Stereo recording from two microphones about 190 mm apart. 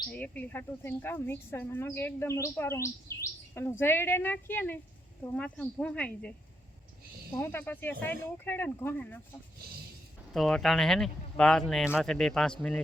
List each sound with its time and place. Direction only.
0.1 s speech: 10° left (ahead or behind)
7.3 s speech: 15° left (ahead or behind)
10.3 s speech: centre (ahead or behind)